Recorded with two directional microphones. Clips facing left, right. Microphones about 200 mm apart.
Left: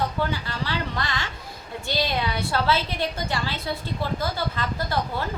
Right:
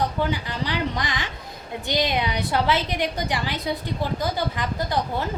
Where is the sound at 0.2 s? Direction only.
15° right (ahead or behind).